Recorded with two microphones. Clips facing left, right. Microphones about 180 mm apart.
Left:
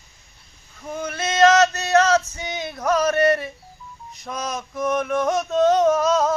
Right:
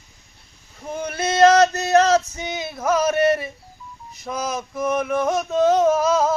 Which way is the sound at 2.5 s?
5° right (ahead or behind).